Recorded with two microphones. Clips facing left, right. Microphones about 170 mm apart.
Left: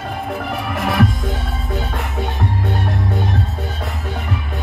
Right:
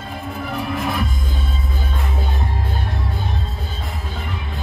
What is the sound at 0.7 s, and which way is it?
Music, 80° left.